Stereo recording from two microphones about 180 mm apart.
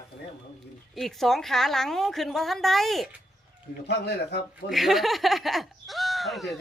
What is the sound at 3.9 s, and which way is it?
Speech, 65° left (ahead or behind).